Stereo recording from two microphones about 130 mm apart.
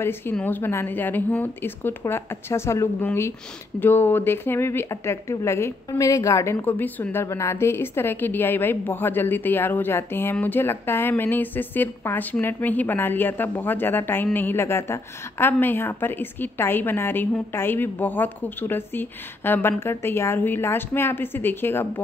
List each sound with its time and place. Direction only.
0.0 s speech: 15° left (ahead or behind)